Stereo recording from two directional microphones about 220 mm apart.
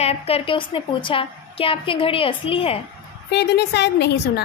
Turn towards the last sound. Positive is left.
turn(degrees=50)  # may be behind; listen again after turning